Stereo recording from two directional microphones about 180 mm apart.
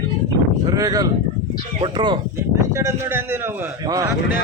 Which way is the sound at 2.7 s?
15° right (ahead or behind).